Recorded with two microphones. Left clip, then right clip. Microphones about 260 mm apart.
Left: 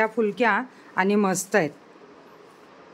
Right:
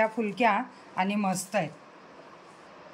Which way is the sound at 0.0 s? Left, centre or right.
Centre.